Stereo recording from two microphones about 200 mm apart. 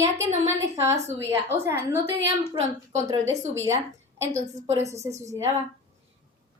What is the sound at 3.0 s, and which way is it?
Speech, 15° right (ahead or behind).